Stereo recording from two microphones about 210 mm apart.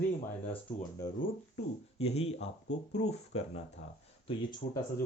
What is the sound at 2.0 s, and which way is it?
Speech, 30° left (ahead or behind).